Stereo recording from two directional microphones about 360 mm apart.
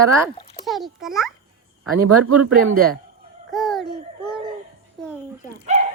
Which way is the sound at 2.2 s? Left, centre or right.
Right.